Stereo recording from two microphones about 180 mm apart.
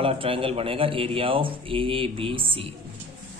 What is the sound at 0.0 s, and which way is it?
A man's voice, 30° right (ahead or behind).